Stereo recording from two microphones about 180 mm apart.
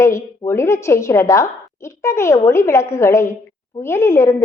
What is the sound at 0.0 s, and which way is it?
A woman's voice, 15° left (ahead or behind).